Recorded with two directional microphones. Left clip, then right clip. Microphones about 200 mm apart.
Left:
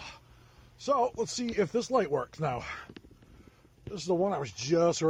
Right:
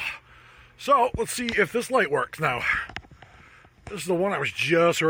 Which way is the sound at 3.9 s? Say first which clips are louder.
Right 4 dB; 30° right (ahead or behind).